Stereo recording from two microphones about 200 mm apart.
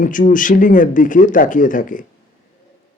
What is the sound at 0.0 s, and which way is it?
A man's voice, 40° left (ahead or behind).